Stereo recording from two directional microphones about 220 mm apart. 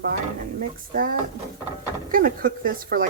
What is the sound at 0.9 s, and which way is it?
Speech, 40° right (ahead or behind).